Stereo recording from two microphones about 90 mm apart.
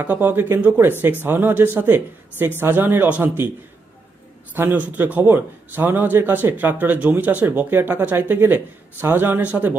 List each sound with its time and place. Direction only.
0.0 s a man's voice: 20° right (ahead or behind)
4.6 s a man's voice: 20° right (ahead or behind)